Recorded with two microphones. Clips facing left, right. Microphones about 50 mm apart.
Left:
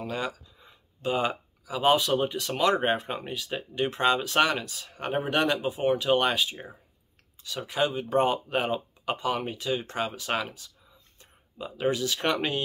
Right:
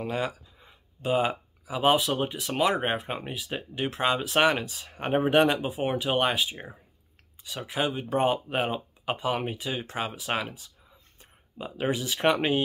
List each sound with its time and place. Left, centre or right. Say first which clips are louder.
0.0 s speech: right 2 dB; centre
4.4 s speech: right 1 dB; right